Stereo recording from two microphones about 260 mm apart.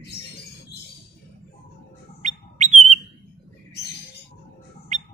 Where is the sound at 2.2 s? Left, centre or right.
Right.